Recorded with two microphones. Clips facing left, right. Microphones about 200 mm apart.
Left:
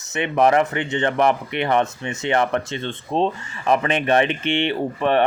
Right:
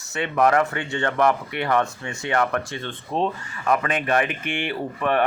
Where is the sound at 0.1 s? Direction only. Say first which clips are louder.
Left 2 dB; 20° left (ahead or behind).